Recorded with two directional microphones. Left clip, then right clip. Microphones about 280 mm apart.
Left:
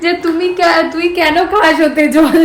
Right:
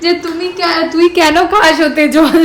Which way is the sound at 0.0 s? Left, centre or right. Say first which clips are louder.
Left 1 dB; centre.